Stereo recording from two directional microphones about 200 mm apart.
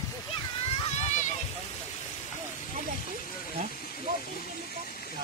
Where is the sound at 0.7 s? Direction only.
25° left (ahead or behind).